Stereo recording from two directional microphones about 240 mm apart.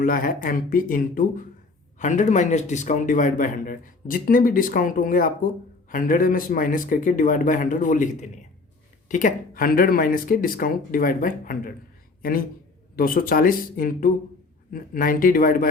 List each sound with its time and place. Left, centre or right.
0.0 s a man's voice: left